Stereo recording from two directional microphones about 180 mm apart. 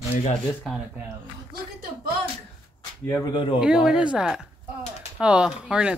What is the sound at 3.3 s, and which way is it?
Speech, 30° left (ahead or behind).